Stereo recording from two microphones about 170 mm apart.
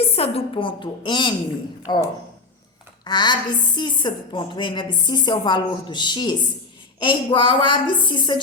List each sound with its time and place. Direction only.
0.0 s a woman's voice: 35° left (ahead or behind)